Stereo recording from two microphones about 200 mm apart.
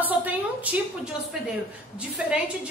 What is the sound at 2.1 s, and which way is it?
Speech, 5° right (ahead or behind).